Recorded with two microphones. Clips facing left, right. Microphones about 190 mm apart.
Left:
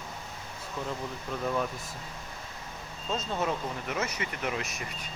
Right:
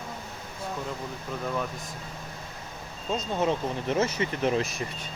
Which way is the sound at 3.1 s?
20° right (ahead or behind).